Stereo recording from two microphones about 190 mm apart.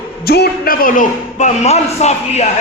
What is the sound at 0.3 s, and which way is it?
A man's voice, 50° left (ahead or behind).